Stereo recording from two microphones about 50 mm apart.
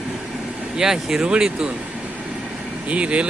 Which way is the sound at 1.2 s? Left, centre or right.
Right.